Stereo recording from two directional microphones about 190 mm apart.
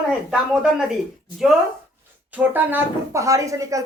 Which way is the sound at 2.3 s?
10° right (ahead or behind).